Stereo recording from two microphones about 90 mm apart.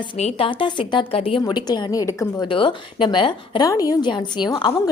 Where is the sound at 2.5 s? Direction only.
70° left (ahead or behind).